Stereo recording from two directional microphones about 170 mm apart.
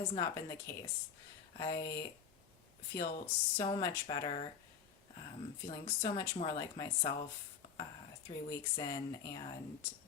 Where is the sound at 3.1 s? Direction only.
35° left (ahead or behind).